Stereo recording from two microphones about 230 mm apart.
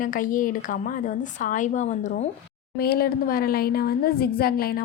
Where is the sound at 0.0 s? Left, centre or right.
Left.